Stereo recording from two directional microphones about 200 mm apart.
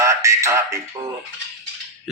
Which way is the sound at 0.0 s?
15° right (ahead or behind).